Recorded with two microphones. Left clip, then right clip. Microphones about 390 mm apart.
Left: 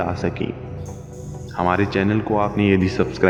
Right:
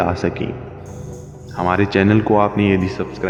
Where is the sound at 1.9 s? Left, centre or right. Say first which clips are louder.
Right 6 dB; right.